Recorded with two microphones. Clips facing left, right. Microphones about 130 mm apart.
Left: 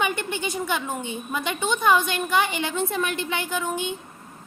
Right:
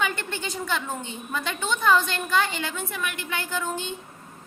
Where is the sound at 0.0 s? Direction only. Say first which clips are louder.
Left 3 dB; 15° left (ahead or behind).